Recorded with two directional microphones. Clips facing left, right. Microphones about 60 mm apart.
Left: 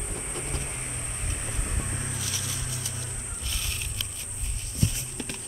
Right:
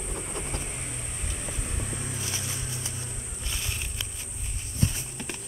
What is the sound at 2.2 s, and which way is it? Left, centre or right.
Vehicle, right.